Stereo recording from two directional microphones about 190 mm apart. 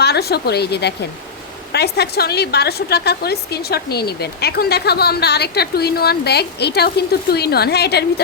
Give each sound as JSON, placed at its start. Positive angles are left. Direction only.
{"t": 0.0, "sound": "a woman's voice", "side_deg": 60}